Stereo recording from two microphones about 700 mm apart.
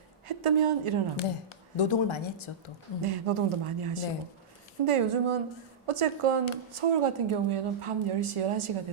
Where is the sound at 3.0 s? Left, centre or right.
Right.